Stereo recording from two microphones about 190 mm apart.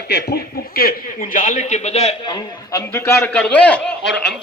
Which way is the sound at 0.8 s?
50° left (ahead or behind).